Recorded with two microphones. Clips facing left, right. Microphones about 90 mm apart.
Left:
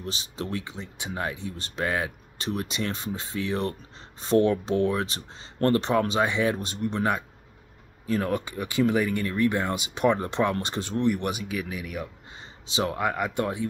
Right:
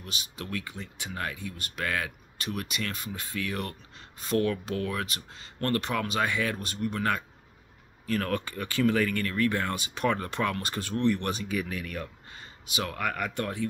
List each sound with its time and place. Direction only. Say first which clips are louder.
0.0 s speech: left 6 dB; 30° left (ahead or behind); by 12.1 s 10° left (ahead or behind)
12.4 s speech: left 5 dB; 25° left (ahead or behind)